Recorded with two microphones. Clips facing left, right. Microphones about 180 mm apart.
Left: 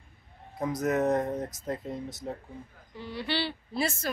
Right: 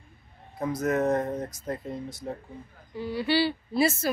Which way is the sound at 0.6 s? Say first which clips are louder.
Right 1 dB; 20° left (ahead or behind).